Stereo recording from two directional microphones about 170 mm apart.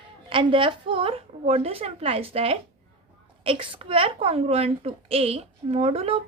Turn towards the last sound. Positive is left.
turn(degrees=-35)  # may be behind; listen again after turning